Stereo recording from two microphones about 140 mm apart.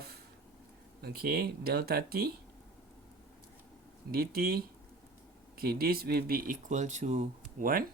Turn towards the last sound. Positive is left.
turn(degrees=-85)